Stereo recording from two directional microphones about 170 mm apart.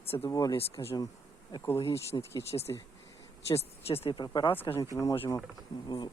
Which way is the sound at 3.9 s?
35° left (ahead or behind).